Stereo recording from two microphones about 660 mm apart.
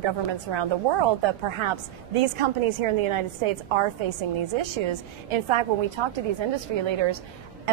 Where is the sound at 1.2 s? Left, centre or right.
Right.